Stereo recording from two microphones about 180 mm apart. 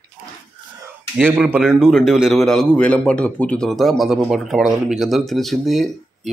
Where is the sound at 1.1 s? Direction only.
5° right (ahead or behind).